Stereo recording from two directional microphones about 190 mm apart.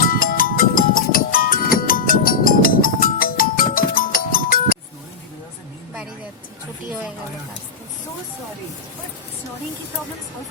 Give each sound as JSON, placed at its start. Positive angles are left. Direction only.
{"t": 0.0, "sound": "music", "side_deg": 50}